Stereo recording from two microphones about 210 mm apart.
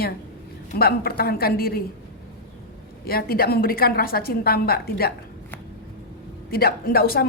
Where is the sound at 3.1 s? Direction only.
45° left (ahead or behind).